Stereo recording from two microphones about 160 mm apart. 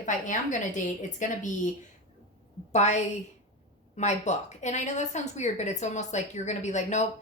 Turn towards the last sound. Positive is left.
turn(degrees=45)  # may be behind; listen again after turning